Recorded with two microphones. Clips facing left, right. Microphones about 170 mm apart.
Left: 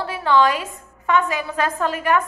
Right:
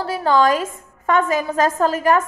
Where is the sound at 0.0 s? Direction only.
40° right (ahead or behind).